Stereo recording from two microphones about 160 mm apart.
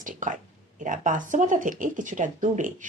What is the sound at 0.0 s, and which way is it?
Speech, 55° right (ahead or behind).